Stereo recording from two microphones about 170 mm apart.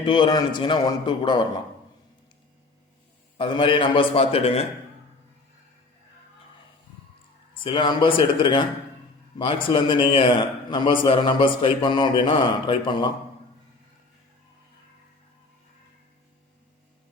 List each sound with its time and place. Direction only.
0.0 s a man's voice: 30° left (ahead or behind)
3.3 s a man's voice: 30° left (ahead or behind)
7.6 s a man's voice: 30° left (ahead or behind)